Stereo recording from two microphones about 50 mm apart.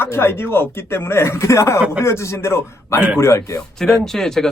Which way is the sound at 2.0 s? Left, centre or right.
Left.